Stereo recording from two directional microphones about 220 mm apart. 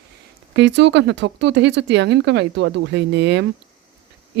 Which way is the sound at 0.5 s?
50° right (ahead or behind).